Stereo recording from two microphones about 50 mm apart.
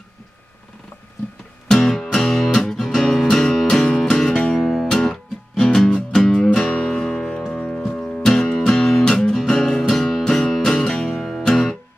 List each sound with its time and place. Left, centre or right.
1.7 s music: centre
4.6 s music: centre